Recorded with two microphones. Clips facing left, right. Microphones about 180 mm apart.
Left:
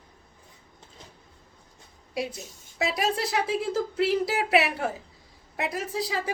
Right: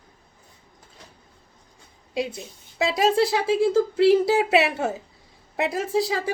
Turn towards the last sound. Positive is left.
turn(degrees=-30)  # may be behind; listen again after turning